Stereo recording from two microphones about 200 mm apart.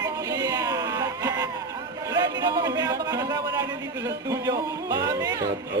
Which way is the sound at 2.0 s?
20° right (ahead or behind).